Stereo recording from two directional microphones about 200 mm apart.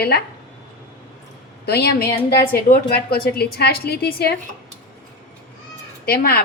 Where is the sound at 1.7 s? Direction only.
55° left (ahead or behind).